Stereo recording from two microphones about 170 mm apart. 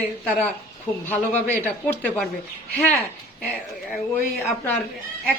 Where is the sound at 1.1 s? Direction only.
10° left (ahead or behind).